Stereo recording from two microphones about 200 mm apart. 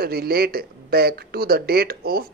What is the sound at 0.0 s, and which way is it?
Speech, 50° right (ahead or behind).